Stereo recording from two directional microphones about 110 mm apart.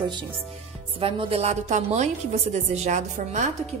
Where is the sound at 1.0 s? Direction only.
55° right (ahead or behind).